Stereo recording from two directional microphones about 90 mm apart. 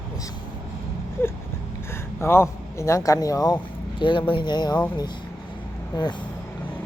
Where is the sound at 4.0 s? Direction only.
65° left (ahead or behind).